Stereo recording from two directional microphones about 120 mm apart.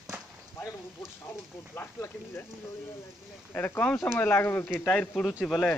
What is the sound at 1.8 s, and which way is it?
Speech, 20° left (ahead or behind).